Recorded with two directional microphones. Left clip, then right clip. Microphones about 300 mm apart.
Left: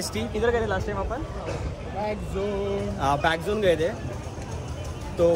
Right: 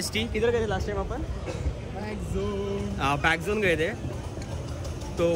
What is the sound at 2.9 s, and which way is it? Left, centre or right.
Speech, centre.